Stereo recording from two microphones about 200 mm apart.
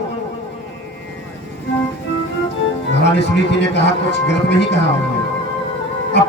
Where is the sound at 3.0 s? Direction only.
60° left (ahead or behind).